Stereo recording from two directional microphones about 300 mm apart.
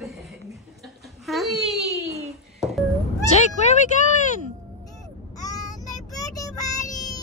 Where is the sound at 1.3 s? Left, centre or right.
Centre.